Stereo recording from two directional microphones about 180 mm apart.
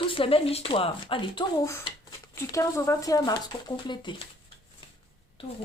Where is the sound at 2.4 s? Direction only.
15° left (ahead or behind).